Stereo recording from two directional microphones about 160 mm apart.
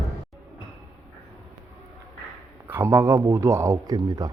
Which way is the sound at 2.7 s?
15° right (ahead or behind).